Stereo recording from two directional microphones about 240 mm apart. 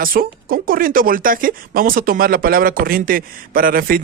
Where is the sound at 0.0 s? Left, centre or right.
Right.